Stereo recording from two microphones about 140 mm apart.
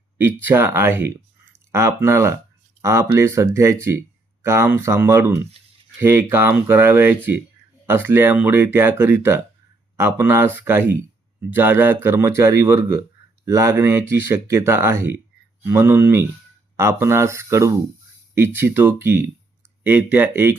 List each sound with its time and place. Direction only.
0.4 s speech: 15° right (ahead or behind)